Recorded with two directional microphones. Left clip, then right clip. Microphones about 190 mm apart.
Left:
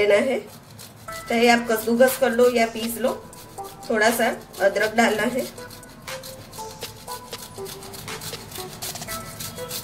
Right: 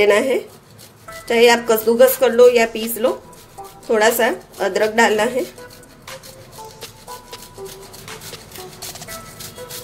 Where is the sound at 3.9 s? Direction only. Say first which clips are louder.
Right 5 dB; 50° right (ahead or behind).